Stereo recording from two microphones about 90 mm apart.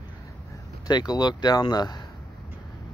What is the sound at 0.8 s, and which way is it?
Speech, 50° left (ahead or behind).